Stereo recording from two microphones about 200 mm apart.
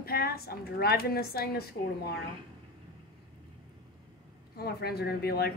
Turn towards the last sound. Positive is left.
turn(degrees=50)  # may be behind; listen again after turning